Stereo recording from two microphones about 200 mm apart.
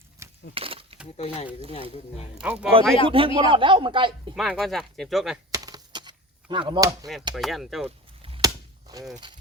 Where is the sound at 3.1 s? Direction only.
25° right (ahead or behind).